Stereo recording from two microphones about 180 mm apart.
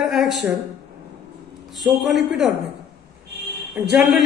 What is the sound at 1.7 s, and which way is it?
Speech, centre (ahead or behind).